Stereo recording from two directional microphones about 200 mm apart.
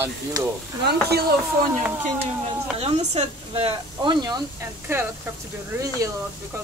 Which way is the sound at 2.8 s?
30° right (ahead or behind).